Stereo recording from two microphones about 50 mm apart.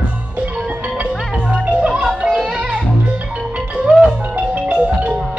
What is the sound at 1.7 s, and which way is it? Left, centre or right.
Music, right.